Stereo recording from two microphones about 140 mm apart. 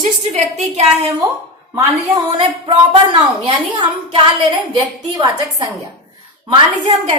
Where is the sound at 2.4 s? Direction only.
35° right (ahead or behind).